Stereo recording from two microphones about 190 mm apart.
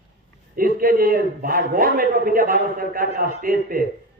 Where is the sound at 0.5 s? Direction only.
50° right (ahead or behind).